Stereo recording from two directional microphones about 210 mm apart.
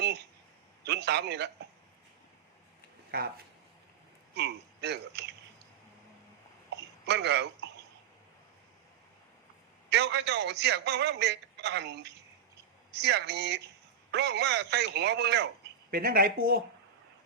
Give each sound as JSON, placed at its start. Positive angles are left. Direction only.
{"t": 0.0, "sound": "a sound", "side_deg": -50}
{"t": 3.1, "sound": "a man's voice", "side_deg": -45}
{"t": 4.4, "sound": "a man's voice", "side_deg": -55}
{"t": 7.0, "sound": "speech", "side_deg": -55}
{"t": 9.9, "sound": "a man's voice", "side_deg": -55}